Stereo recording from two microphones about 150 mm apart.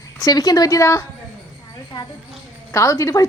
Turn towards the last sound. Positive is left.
turn(degrees=20)  # may be behind; listen again after turning